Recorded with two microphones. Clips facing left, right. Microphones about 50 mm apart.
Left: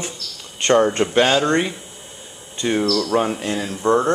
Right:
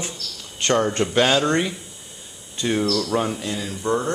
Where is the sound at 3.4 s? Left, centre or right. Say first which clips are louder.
Left 5 dB; left.